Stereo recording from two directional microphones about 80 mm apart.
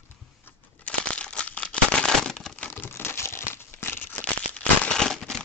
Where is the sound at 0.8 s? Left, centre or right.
Centre.